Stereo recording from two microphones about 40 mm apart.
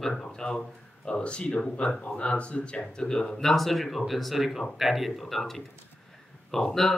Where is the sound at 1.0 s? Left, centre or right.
Left.